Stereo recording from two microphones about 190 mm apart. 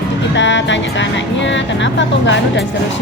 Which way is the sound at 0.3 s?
70° left (ahead or behind).